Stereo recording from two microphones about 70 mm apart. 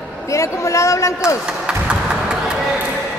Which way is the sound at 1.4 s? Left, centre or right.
Centre.